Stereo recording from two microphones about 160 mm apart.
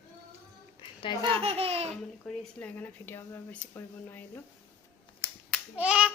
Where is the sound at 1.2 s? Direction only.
35° right (ahead or behind).